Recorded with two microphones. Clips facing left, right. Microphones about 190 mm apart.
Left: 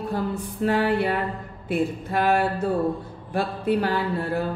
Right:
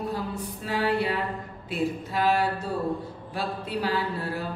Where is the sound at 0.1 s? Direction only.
50° left (ahead or behind).